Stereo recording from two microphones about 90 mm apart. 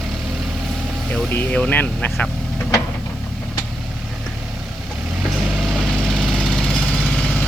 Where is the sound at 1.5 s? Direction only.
15° left (ahead or behind).